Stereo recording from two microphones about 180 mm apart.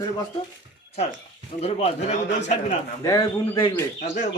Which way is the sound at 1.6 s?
40° left (ahead or behind).